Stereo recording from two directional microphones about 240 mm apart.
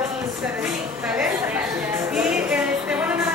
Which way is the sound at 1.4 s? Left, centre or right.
Centre.